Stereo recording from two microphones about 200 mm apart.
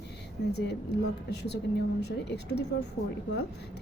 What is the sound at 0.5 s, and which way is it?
A woman's voice, 55° left (ahead or behind).